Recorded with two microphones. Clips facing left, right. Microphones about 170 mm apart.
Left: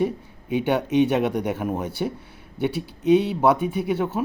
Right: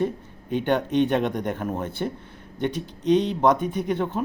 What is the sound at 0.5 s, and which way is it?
Speech, 10° left (ahead or behind).